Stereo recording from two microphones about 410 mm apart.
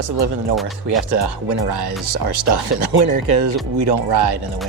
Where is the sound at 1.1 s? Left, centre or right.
Right.